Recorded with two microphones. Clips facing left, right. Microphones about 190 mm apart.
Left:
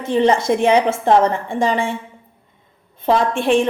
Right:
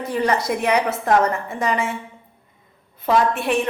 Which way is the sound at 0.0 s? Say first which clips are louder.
Left 5 dB; 25° left (ahead or behind).